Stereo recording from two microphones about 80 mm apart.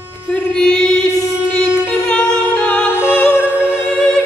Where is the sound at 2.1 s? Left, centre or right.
Centre.